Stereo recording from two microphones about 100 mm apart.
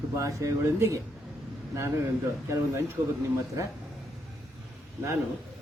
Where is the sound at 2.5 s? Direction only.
25° right (ahead or behind).